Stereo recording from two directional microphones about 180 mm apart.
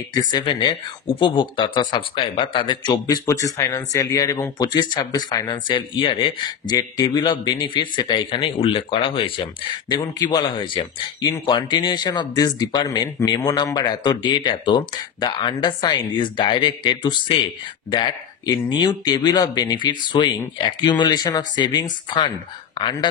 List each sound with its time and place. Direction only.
0.1 s speech: 25° left (ahead or behind)